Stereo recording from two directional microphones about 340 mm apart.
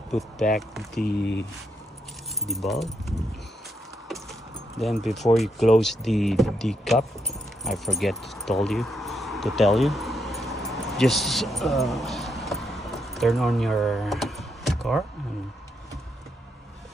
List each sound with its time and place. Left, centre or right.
0.6 s speech: centre
1.0 s speech: left
2.4 s speech: centre
4.1 s keys jangling: centre
5.8 s speech: centre
7.6 s keys jangling: centre